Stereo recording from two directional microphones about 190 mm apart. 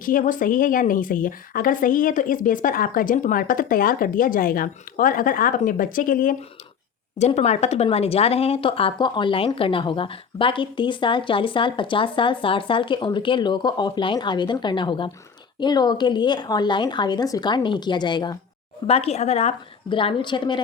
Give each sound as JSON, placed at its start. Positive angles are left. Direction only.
{"t": 0.0, "sound": "speech", "side_deg": 45}
{"t": 7.2, "sound": "a woman's voice", "side_deg": 35}